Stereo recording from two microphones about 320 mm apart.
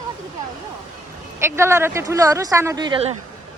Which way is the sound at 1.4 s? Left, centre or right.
Centre.